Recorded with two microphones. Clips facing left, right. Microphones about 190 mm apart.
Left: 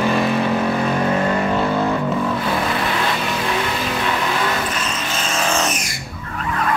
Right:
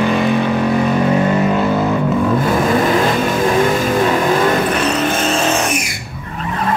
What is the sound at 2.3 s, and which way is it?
Vehicle, 45° right (ahead or behind).